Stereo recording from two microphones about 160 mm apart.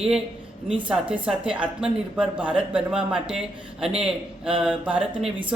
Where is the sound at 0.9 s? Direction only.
5° right (ahead or behind).